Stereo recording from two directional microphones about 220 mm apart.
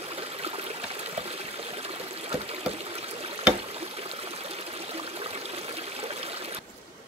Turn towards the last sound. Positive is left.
turn(degrees=-25)  # may be behind; listen again after turning